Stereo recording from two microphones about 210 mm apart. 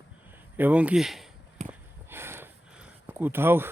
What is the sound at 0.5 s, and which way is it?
Speech, 5° right (ahead or behind).